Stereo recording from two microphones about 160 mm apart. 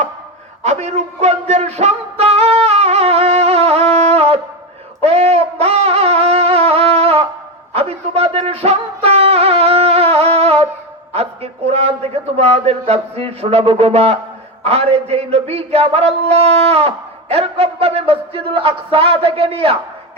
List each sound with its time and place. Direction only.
0.6 s music: 45° right (ahead or behind)
4.9 s wind instrument: 40° right (ahead or behind)
7.7 s music: 40° right (ahead or behind)
11.1 s a man's voice: 40° right (ahead or behind)